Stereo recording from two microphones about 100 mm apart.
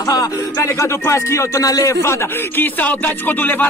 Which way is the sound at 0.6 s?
25° left (ahead or behind).